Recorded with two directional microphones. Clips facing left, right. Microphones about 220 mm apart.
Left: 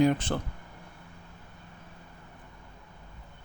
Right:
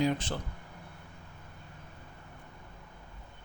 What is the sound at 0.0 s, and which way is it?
Speech, 55° left (ahead or behind).